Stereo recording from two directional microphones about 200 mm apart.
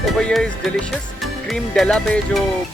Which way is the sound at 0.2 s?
5° left (ahead or behind).